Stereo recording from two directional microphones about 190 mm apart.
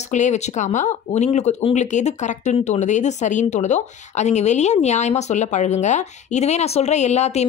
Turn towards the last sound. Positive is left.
turn(degrees=35)  # may be behind; listen again after turning